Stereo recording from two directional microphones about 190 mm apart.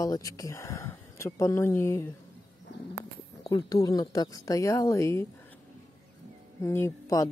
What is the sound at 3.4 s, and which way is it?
Speech, 20° left (ahead or behind).